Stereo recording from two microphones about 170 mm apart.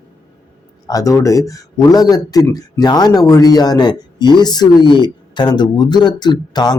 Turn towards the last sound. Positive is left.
turn(degrees=25)  # may be behind; listen again after turning